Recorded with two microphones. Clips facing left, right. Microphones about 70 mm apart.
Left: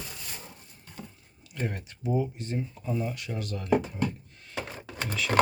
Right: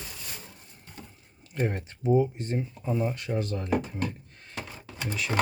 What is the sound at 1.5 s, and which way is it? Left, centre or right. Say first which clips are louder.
Speech: right 5 dB; right.